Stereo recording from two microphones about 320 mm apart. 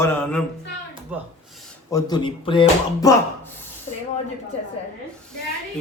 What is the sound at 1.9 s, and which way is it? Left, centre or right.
Speech, centre.